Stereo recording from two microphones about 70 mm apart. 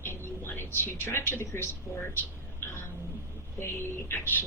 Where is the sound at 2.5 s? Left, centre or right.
Left.